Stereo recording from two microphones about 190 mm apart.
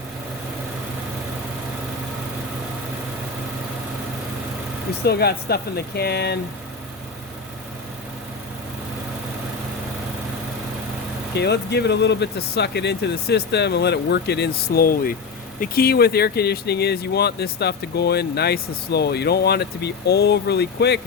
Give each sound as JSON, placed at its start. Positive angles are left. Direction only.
{"t": 5.0, "sound": "speech", "side_deg": 55}
{"t": 11.3, "sound": "speech", "side_deg": 60}